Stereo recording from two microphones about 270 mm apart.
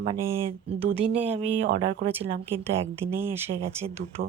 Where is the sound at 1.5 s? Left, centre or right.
Right.